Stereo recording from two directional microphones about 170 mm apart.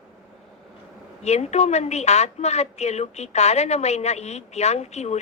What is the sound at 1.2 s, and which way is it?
A man's voice, 40° left (ahead or behind).